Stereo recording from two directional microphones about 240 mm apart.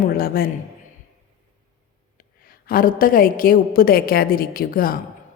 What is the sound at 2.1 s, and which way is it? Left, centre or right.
A woman's voice, left.